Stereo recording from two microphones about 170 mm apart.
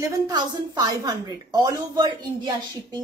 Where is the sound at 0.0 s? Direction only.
25° right (ahead or behind).